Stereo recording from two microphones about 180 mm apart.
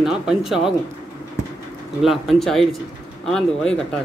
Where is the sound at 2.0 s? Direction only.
Centre (ahead or behind).